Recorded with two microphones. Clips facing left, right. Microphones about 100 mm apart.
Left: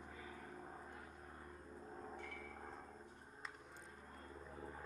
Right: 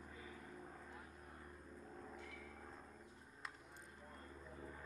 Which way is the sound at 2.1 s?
50° left (ahead or behind).